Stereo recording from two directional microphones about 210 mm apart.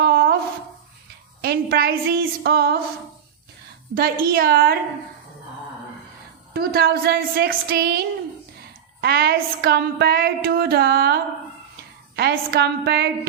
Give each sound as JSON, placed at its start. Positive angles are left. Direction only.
{"t": 0.0, "sound": "a sound", "side_deg": -45}
{"t": 1.4, "sound": "a woman's voice", "side_deg": -50}
{"t": 3.9, "sound": "a woman's voice", "side_deg": -45}
{"t": 6.5, "sound": "a woman's voice", "side_deg": -50}